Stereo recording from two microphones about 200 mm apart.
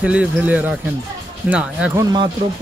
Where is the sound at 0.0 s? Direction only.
5° right (ahead or behind).